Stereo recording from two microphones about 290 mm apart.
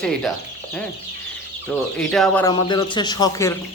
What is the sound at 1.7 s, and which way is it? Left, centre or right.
Speech, centre.